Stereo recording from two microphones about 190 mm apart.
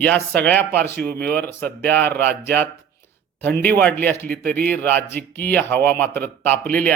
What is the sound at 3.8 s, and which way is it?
Speech, 10° left (ahead or behind).